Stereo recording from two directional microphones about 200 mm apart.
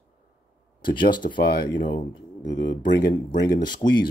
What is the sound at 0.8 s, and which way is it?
Speech, 25° left (ahead or behind).